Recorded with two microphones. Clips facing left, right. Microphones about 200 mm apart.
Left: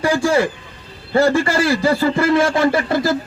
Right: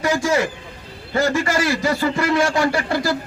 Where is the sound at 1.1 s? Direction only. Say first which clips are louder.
Left 4 dB; 30° left (ahead or behind).